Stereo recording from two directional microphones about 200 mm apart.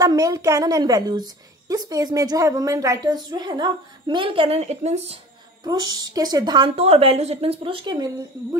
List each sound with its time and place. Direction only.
0.0 s a woman's voice: 15° right (ahead or behind)